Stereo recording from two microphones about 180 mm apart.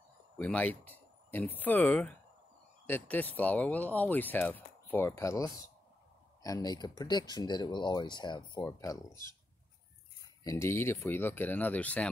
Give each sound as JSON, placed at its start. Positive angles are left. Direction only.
{"t": 0.4, "sound": "speech", "side_deg": 10}